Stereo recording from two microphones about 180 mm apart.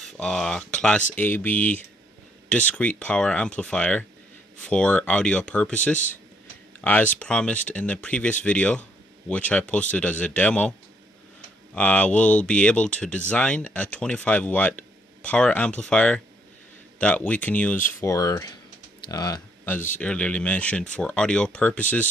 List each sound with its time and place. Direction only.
0.0 s speech: 5° left (ahead or behind)
11.7 s speech: 5° left (ahead or behind)
18.0 s speech: 20° left (ahead or behind)